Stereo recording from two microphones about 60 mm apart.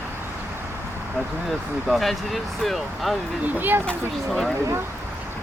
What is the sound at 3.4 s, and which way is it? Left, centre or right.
Speech, right.